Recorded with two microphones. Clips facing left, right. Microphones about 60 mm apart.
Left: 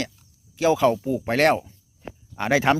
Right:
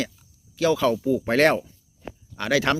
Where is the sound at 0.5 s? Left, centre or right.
Centre.